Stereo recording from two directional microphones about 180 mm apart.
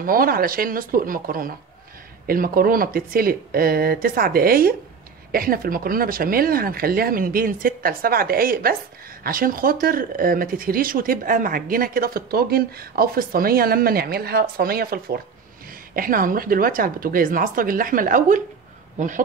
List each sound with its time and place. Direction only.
0.0 s speech: 55° right (ahead or behind)